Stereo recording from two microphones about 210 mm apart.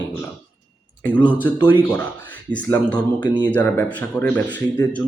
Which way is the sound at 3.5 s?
10° left (ahead or behind).